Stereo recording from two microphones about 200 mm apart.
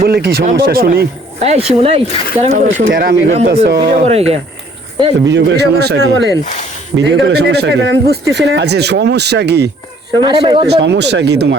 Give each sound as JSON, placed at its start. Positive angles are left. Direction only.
{"t": 0.0, "sound": "speech", "side_deg": -50}
{"t": 1.4, "sound": "speech", "side_deg": -30}
{"t": 3.9, "sound": "speech", "side_deg": -30}
{"t": 5.3, "sound": "speech", "side_deg": -60}
{"t": 6.4, "sound": "speech", "side_deg": 35}
{"t": 6.9, "sound": "speech", "side_deg": -60}
{"t": 10.2, "sound": "speech", "side_deg": -25}
{"t": 10.8, "sound": "speech", "side_deg": -60}